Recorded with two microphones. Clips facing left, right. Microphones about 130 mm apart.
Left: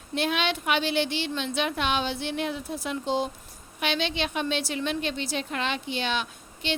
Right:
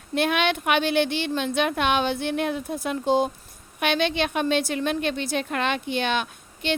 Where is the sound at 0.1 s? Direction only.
55° right (ahead or behind).